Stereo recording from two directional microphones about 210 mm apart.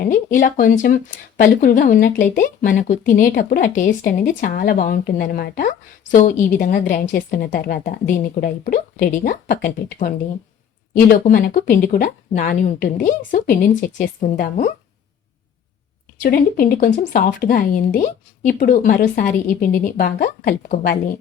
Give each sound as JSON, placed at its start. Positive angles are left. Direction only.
{"t": 0.0, "sound": "speech", "side_deg": 40}
{"t": 16.2, "sound": "speech", "side_deg": 45}